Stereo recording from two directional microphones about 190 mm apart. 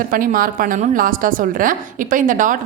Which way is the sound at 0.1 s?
45° right (ahead or behind).